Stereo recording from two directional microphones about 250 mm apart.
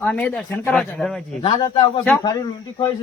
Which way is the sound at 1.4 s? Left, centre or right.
Centre.